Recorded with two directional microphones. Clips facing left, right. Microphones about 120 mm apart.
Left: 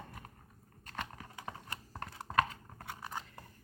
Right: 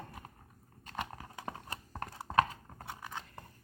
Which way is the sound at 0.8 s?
10° right (ahead or behind).